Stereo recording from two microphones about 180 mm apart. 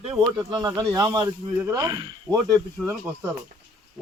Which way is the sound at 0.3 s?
20° right (ahead or behind).